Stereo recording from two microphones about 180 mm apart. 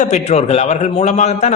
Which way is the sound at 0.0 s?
40° left (ahead or behind).